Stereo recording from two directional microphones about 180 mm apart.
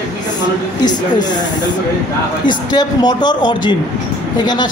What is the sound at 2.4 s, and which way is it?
A man's voice, 25° left (ahead or behind).